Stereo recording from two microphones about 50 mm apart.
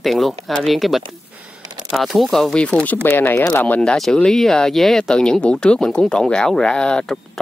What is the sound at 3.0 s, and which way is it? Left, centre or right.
Speech, left.